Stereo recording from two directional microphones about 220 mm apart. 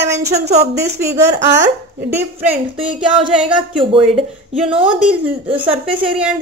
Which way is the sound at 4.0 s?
Centre (ahead or behind).